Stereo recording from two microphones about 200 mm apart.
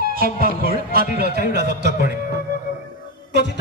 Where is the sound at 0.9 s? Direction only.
55° right (ahead or behind).